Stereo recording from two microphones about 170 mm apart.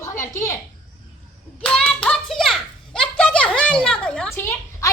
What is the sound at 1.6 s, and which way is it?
Hands, 5° left (ahead or behind).